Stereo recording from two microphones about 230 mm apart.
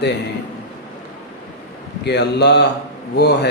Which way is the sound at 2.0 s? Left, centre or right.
Left.